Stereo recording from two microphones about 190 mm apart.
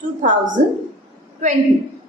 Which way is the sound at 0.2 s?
40° right (ahead or behind).